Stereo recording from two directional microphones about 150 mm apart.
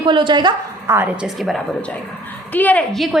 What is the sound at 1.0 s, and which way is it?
A woman's voice, 5° right (ahead or behind).